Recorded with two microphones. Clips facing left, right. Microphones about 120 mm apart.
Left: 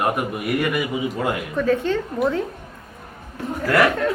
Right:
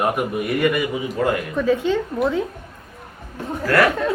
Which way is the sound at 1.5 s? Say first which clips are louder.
Left 1 dB; 5° right (ahead or behind).